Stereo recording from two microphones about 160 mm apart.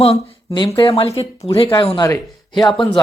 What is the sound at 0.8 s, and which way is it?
A man's voice, 35° left (ahead or behind).